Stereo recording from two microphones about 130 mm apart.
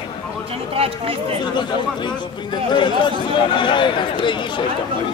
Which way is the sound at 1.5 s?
35° left (ahead or behind).